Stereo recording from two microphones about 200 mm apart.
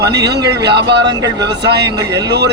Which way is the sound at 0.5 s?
55° right (ahead or behind).